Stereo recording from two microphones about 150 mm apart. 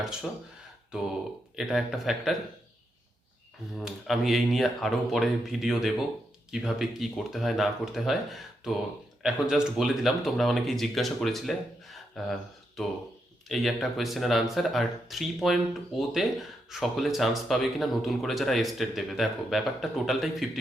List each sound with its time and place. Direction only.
1.5 s speech: centre (ahead or behind)
3.8 s speech: centre (ahead or behind)